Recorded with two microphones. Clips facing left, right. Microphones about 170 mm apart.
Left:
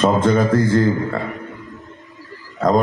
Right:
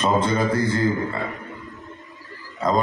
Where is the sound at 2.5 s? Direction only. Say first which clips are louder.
Left 5 dB; 55° left (ahead or behind).